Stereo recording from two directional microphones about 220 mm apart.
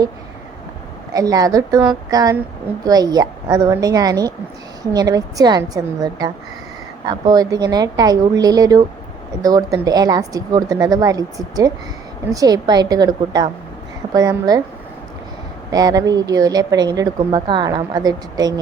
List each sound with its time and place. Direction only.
1.1 s a woman's voice: 15° right (ahead or behind)
15.7 s a woman's voice: 15° right (ahead or behind)